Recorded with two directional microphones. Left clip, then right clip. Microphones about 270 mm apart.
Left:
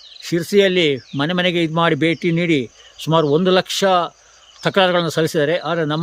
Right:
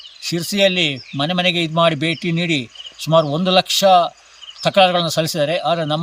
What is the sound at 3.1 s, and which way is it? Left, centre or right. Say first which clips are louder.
Speech: even; centre.